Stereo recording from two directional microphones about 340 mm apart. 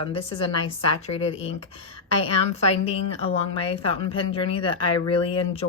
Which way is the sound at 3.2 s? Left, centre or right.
Centre.